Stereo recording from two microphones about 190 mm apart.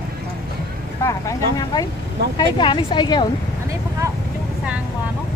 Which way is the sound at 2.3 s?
25° left (ahead or behind).